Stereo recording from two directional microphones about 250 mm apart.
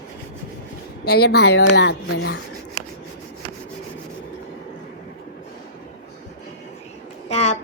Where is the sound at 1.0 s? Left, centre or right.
Left.